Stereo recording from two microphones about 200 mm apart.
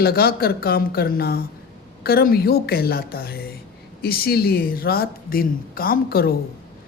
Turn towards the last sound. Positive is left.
turn(degrees=50)  # may be behind; listen again after turning